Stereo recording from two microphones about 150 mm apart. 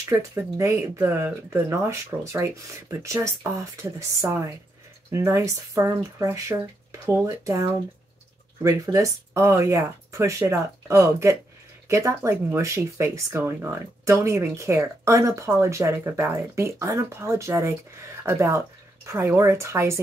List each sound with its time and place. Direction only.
0.1 s speech: 20° right (ahead or behind)